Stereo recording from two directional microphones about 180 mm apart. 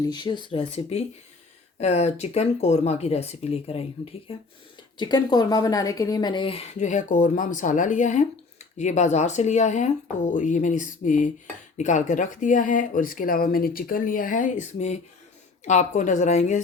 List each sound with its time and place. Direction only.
0.0 s speech: 25° left (ahead or behind)
4.9 s speech: 25° left (ahead or behind); by 16.6 s 40° left (ahead or behind)